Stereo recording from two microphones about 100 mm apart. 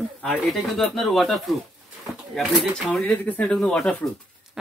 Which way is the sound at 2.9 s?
15° left (ahead or behind).